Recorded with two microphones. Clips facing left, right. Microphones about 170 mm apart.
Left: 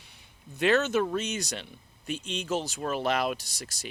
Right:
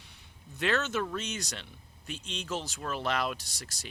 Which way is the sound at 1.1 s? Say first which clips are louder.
Left 5 dB; 15° left (ahead or behind).